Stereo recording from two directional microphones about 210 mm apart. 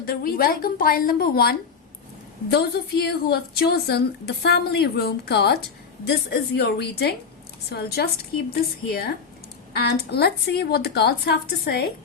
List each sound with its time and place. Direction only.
0.0 s a woman's voice: 45° left (ahead or behind)